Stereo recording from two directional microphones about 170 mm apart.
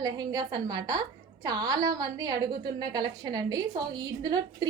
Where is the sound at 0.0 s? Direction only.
25° right (ahead or behind).